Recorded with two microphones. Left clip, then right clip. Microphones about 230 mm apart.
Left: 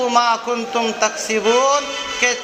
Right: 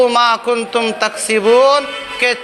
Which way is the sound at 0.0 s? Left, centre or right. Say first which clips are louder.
Right 4 dB; right.